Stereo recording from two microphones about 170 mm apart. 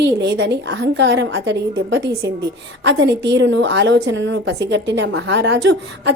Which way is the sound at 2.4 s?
80° right.